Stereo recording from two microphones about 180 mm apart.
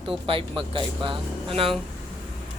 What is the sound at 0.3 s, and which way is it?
Speech, 30° right (ahead or behind).